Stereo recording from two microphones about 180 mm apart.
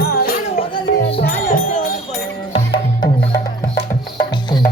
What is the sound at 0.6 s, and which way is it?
Music, 30° left (ahead or behind).